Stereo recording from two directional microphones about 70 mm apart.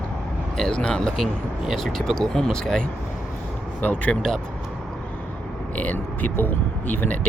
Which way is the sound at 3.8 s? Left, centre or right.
Left.